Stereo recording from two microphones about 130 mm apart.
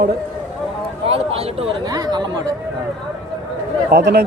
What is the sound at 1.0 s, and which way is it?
Speech, 50° right (ahead or behind).